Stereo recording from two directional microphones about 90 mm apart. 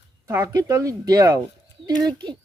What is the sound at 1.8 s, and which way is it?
Speech, 55° right (ahead or behind).